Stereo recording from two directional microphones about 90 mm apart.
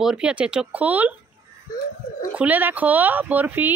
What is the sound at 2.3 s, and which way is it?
Speech, 15° right (ahead or behind).